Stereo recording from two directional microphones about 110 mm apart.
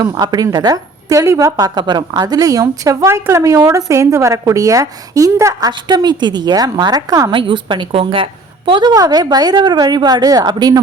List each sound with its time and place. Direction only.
0.0 s a woman's voice: 40° right (ahead or behind)
1.5 s a woman's voice: 40° right (ahead or behind)
7.3 s a woman's voice: 50° right (ahead or behind)